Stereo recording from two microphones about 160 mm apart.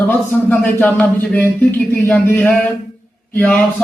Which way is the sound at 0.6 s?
10° left (ahead or behind).